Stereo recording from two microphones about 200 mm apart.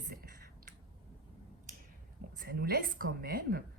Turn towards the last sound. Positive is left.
turn(degrees=-50)  # may be behind; listen again after turning